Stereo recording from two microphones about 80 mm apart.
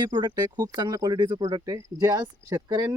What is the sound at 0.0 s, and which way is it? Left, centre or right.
Speech, right.